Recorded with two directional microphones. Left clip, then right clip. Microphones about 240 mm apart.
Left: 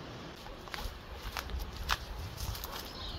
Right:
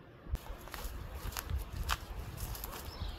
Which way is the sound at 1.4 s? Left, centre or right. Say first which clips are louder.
Left 5 dB; right.